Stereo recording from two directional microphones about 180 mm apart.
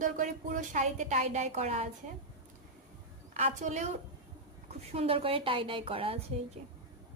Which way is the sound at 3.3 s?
40° right (ahead or behind).